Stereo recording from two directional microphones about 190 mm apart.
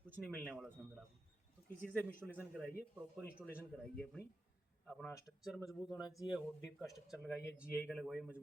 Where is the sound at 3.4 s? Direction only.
Centre (ahead or behind).